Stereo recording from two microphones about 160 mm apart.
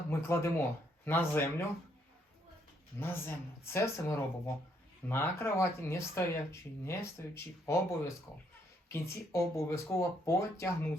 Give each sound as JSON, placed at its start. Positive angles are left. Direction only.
{"t": 0.1, "sound": "speech", "side_deg": 15}
{"t": 3.0, "sound": "speech", "side_deg": 15}